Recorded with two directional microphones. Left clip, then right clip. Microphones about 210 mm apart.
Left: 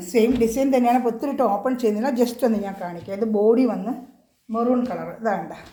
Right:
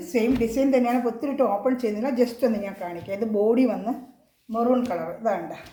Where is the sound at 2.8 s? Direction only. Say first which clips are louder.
Left 2 dB; 15° left (ahead or behind).